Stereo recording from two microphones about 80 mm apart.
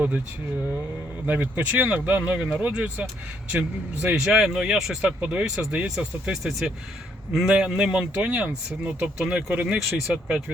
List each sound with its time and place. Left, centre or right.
1.3 s speech: centre
6.0 s speech: centre